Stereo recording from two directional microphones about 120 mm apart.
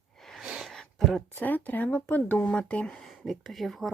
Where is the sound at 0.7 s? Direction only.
5° left (ahead or behind).